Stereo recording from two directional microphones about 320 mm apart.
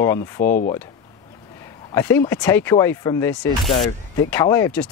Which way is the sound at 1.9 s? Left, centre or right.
Centre.